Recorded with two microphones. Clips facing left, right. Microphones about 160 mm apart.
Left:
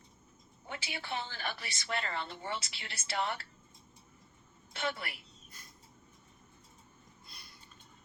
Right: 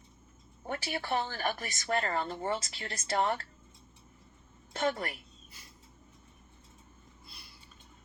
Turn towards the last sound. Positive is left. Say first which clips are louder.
# right 1 dB
turn(degrees=-5)  # may be behind; listen again after turning